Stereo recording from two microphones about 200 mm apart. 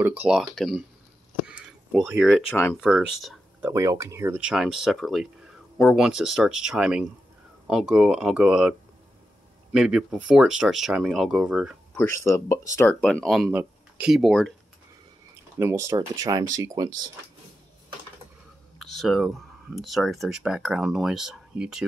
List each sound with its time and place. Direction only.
0.0 s speech: 10° right (ahead or behind)
1.5 s a sound: 5° right (ahead or behind)
2.5 s speech: 10° left (ahead or behind)
2.8 s speech: centre (ahead or behind)
3.7 s speech: 15° right (ahead or behind)
12.0 s speech: 15° left (ahead or behind)
13.0 s speech: 5° left (ahead or behind)
15.6 s speech: 15° right (ahead or behind)
18.8 s speech: centre (ahead or behind)